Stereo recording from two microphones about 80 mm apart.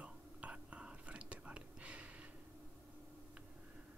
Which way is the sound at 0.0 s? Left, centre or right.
Centre.